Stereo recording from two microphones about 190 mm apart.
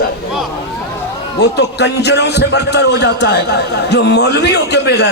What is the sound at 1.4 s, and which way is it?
A man's voice, 60° left (ahead or behind).